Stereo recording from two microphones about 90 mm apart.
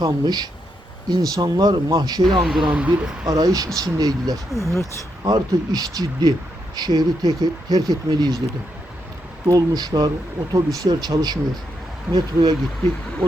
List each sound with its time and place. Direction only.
0.0 s speech: 50° right (ahead or behind)
2.4 s speech: 5° right (ahead or behind)
3.2 s speech: 45° right (ahead or behind)
4.5 s speech: 35° left (ahead or behind)
4.8 s speech: 50° right (ahead or behind)
9.5 s speech: 45° right (ahead or behind)